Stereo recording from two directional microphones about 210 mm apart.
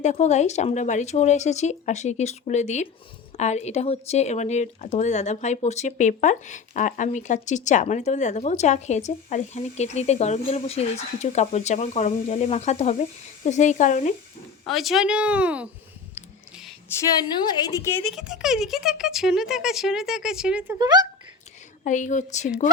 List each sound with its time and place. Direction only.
0.0 s speech: 35° left (ahead or behind)
14.7 s speech: centre (ahead or behind)
17.4 s a woman's voice: 20° left (ahead or behind)
18.0 s speech: centre (ahead or behind)
20.7 s speech: 20° right (ahead or behind)
21.8 s speech: 35° left (ahead or behind)